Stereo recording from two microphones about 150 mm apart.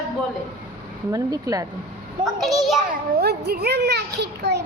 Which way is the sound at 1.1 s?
25° right (ahead or behind).